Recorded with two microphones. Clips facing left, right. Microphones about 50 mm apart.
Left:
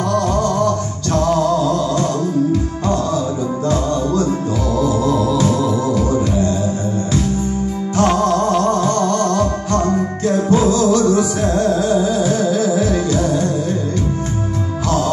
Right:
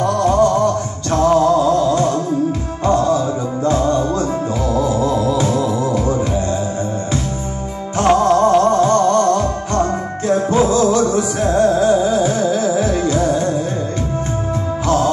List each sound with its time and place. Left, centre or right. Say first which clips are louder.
0.0 s music: right 3 dB; right
8.0 s music: right 3 dB; centre